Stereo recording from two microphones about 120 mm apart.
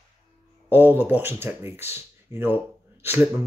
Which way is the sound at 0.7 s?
15° right (ahead or behind).